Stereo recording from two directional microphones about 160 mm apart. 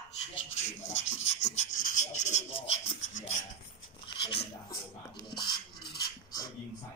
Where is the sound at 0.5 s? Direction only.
45° left (ahead or behind).